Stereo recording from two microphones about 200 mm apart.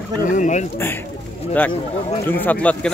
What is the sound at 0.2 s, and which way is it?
Speech, 40° left (ahead or behind).